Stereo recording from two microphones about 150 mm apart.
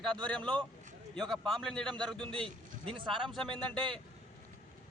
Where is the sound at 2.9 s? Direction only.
35° right (ahead or behind).